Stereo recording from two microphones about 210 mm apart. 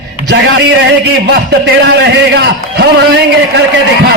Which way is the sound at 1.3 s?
55° right (ahead or behind).